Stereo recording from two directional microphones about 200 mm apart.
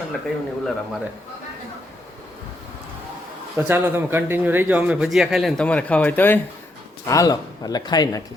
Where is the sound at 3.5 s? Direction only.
10° right (ahead or behind); by 8.2 s 20° left (ahead or behind).